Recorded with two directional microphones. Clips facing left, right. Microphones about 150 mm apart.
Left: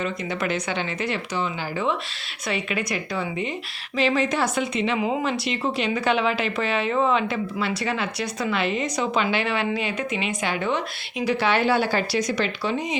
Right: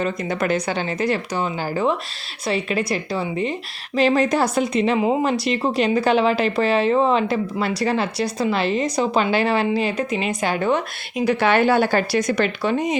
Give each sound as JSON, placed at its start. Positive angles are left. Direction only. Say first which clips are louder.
{"t": 0.0, "sound": "a woman's voice", "louder": "right 4 dB", "side_deg": -40}